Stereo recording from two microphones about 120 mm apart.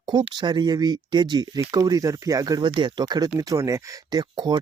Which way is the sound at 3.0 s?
30° right (ahead or behind).